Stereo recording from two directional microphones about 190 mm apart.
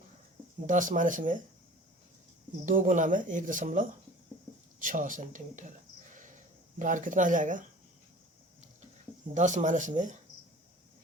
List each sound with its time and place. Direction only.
0.7 s speech: 40° right (ahead or behind)
2.6 s speech: 40° right (ahead or behind)
6.1 s a sound: 40° right (ahead or behind)
9.3 s speech: 40° right (ahead or behind)